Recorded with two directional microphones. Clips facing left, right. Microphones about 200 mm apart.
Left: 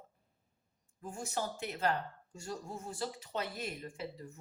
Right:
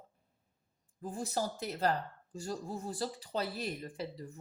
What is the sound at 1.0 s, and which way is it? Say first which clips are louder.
Speech: right 3 dB; 35° right (ahead or behind).